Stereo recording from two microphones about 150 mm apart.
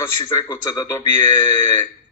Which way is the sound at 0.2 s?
20° left (ahead or behind).